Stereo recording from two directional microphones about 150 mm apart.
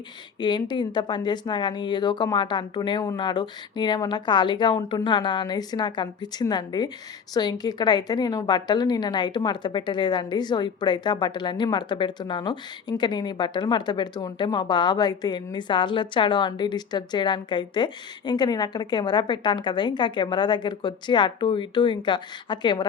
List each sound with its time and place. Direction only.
0.3 s a woman's voice: 30° left (ahead or behind)